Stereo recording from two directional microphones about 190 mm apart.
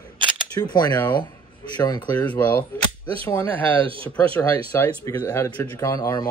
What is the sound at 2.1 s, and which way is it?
Speech, 10° left (ahead or behind).